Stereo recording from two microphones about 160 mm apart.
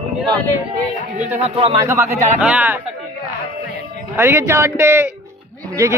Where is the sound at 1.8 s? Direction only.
20° right (ahead or behind).